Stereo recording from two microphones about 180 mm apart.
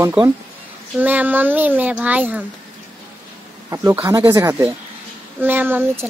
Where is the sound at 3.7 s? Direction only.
15° right (ahead or behind).